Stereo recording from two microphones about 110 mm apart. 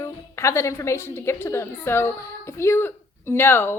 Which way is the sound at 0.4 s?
25° left (ahead or behind).